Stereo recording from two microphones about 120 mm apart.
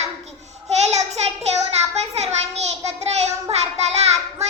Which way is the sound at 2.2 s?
65° right (ahead or behind).